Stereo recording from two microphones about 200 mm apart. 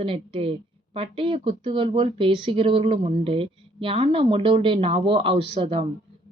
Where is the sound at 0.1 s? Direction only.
30° right (ahead or behind).